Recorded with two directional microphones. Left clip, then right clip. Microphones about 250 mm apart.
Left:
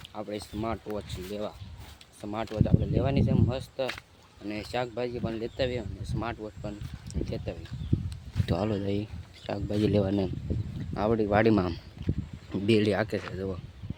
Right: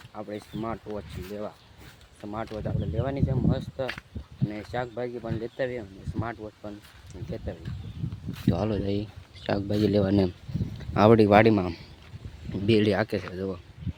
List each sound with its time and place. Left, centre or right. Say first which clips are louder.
0.1 s speech: even; centre
7.1 s speech: left 2 dB; centre
8.5 s speech: left 1 dB; centre
9.5 s speech: right 3 dB; centre
10.9 s speech: right 8 dB; right
11.4 s speech: right 2 dB; centre